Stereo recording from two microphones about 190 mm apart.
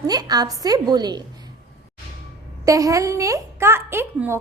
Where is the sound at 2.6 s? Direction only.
15° right (ahead or behind).